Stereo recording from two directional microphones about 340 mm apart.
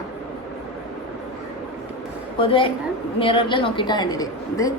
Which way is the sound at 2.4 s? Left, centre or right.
Centre.